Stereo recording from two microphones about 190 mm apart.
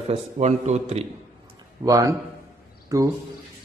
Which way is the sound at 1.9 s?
20° right (ahead or behind).